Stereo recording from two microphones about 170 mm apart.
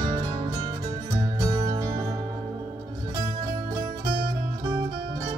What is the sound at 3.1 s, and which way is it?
Music, 20° right (ahead or behind).